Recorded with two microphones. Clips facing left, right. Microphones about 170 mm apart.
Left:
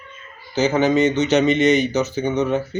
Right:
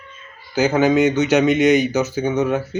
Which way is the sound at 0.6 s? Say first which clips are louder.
Right 1 dB; centre (ahead or behind).